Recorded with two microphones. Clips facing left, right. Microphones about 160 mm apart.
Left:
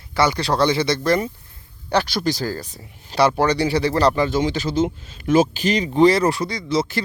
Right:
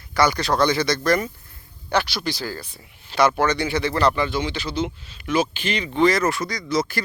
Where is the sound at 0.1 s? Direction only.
25° left (ahead or behind).